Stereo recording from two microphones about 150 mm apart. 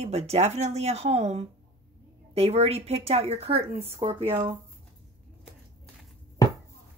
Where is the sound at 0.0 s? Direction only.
45° right (ahead or behind).